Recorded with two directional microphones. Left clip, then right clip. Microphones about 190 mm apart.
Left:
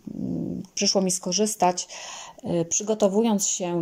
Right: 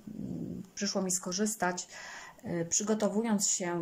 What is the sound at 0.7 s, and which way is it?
Speech, 20° left (ahead or behind).